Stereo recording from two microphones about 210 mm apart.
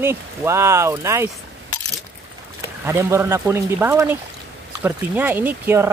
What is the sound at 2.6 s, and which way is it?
Speech, 15° right (ahead or behind).